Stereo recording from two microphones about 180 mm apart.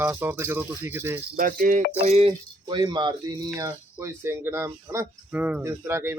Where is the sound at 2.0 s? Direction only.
35° right (ahead or behind).